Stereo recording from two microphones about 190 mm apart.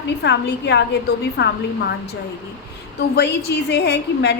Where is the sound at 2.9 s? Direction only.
60° left (ahead or behind).